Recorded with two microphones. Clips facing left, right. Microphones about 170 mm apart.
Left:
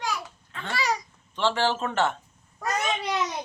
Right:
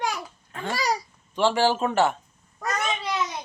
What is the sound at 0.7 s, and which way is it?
Speech, 35° right (ahead or behind).